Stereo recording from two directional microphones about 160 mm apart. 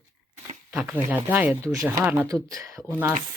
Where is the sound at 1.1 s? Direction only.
10° right (ahead or behind).